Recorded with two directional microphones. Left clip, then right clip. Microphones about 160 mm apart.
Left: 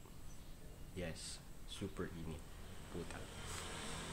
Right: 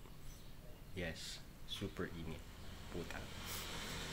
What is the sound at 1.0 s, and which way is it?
Speech, 10° left (ahead or behind).